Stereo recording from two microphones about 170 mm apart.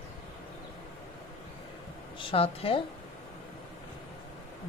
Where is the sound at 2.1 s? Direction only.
35° left (ahead or behind).